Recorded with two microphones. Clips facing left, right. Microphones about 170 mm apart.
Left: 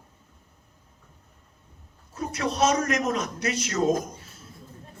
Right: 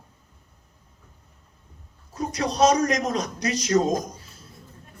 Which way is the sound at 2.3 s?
35° right (ahead or behind).